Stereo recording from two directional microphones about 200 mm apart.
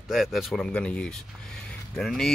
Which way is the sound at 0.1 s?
Centre (ahead or behind).